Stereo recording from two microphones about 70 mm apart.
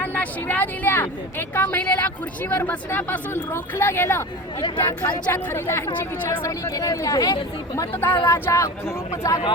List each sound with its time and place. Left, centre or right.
0.0 s speech: left
5.3 s a woman's voice: left
6.4 s speech: left
8.0 s a woman's voice: left
8.4 s speech: left